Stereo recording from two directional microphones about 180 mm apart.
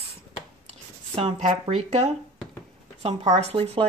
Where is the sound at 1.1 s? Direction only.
35° right (ahead or behind).